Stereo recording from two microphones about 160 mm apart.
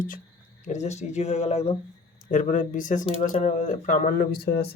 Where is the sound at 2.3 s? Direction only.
55° left (ahead or behind); by 4.7 s 80° left.